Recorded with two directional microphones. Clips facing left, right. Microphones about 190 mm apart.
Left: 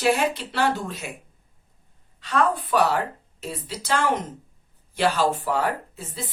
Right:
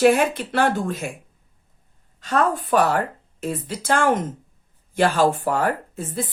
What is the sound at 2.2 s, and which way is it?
Speech, 45° right (ahead or behind).